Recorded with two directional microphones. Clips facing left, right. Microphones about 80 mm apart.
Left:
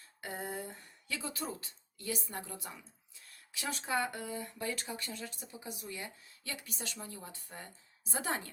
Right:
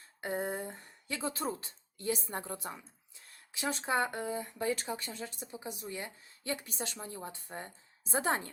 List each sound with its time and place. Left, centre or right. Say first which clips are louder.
0.2 s speech: right 5 dB; right